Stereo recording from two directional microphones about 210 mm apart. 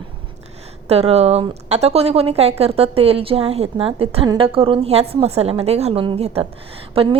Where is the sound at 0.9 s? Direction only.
30° right (ahead or behind).